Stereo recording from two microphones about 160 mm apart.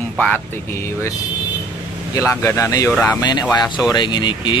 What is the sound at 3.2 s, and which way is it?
Speech, 25° left (ahead or behind).